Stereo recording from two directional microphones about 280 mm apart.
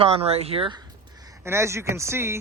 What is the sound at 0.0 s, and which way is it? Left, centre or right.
Speech, right.